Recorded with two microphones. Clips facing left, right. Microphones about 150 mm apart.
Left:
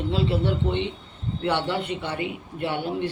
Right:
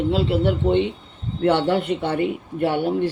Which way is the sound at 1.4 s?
50° right (ahead or behind).